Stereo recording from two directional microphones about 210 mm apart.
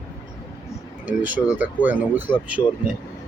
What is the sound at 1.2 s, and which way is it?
Speech, 10° right (ahead or behind).